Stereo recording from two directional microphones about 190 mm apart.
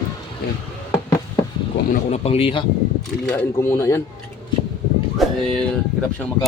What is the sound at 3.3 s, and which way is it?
Speech, 10° left (ahead or behind).